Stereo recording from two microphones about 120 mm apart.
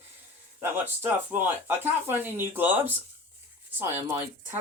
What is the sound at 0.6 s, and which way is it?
Speech, 15° right (ahead or behind).